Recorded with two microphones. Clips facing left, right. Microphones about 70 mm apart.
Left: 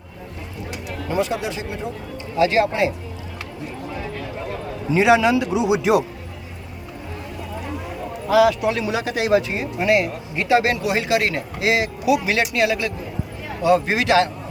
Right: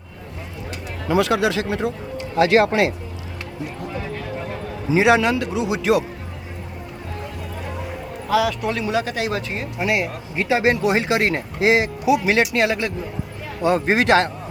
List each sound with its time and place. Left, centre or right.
1.0 s speech: right
2.3 s speech: right
4.9 s speech: centre
5.1 s speech: centre
8.3 s speech: centre
9.7 s speech: centre
10.3 s speech: right